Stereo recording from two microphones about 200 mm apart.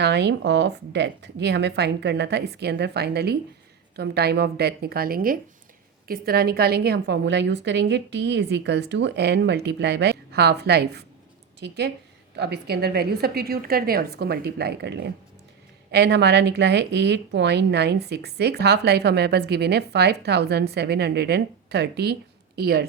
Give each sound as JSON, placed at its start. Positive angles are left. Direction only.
{"t": 0.0, "sound": "a woman's voice", "side_deg": -60}